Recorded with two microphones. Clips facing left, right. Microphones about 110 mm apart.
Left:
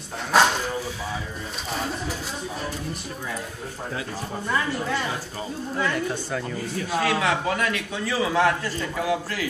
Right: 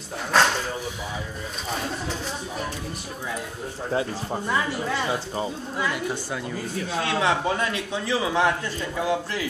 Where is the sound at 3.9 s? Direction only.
30° right (ahead or behind).